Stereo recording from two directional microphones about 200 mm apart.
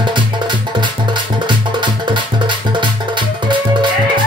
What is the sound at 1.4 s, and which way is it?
Music, 25° right (ahead or behind).